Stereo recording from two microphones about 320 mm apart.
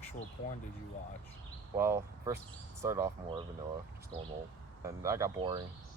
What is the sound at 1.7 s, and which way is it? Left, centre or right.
Speech, centre.